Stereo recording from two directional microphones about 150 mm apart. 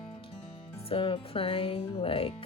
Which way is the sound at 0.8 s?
35° left (ahead or behind).